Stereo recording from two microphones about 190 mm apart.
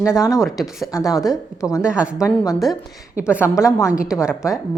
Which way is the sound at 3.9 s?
5° right (ahead or behind).